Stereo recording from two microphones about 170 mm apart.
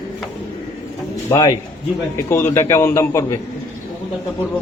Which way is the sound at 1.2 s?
20° left (ahead or behind).